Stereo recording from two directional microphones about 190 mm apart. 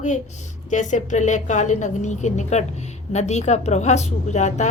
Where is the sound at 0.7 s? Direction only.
40° left (ahead or behind).